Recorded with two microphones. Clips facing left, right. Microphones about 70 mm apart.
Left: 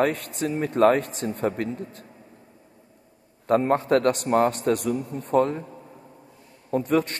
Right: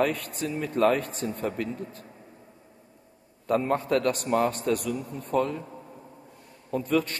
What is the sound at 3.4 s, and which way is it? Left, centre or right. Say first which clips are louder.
A man's voice: left 4 dB; left.